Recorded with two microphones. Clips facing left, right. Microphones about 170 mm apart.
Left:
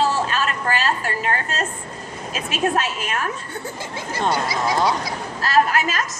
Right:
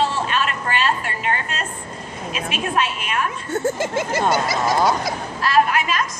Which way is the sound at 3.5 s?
45° right (ahead or behind).